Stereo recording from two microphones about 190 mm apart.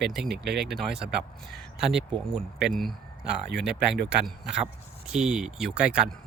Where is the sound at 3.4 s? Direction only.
60° right (ahead or behind).